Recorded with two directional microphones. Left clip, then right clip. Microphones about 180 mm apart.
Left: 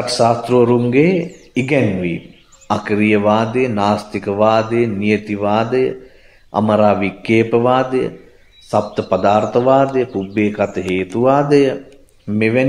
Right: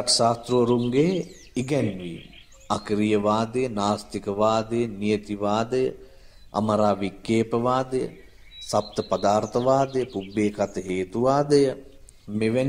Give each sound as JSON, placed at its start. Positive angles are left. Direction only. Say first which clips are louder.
{"t": 0.0, "sound": "speech", "louder": "left 7 dB", "side_deg": -35}